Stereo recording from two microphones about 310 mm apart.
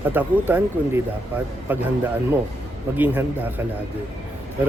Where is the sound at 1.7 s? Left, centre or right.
Centre.